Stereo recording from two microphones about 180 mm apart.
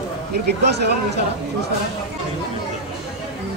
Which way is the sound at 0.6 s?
70° right (ahead or behind).